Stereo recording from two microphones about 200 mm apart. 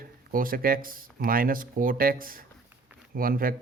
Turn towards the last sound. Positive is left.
turn(degrees=-45)  # may be behind; listen again after turning